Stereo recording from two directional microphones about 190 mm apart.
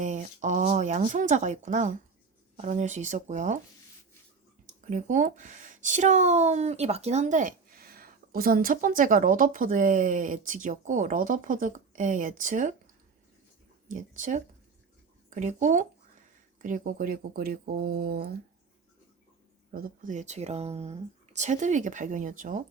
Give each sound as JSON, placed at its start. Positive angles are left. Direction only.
{"t": 0.0, "sound": "speech", "side_deg": -40}
{"t": 4.9, "sound": "speech", "side_deg": -40}
{"t": 13.8, "sound": "speech", "side_deg": -40}
{"t": 19.7, "sound": "speech", "side_deg": -45}